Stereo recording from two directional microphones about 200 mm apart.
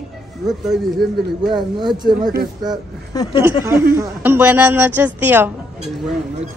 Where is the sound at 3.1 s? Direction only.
15° left (ahead or behind).